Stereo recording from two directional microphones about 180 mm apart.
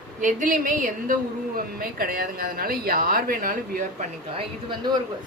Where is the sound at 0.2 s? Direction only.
45° right (ahead or behind).